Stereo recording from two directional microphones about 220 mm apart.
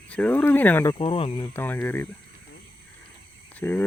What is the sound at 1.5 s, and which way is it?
Speech, 10° left (ahead or behind).